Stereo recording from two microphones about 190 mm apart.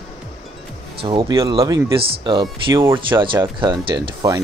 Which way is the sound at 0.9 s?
25° right (ahead or behind).